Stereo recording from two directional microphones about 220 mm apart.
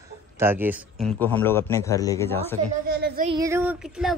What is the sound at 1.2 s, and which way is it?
A man's voice, 10° left (ahead or behind).